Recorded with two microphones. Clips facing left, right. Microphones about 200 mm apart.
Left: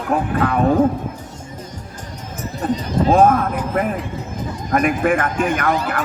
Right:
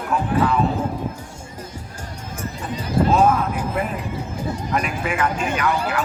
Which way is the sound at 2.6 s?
55° left (ahead or behind).